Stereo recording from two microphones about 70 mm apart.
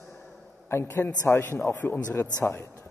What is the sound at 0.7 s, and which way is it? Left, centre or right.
A man's voice, left.